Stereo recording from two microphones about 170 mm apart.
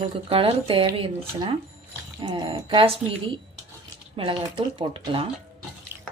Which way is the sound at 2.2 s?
25° right (ahead or behind).